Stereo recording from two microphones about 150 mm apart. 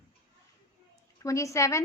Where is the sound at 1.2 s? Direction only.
20° left (ahead or behind).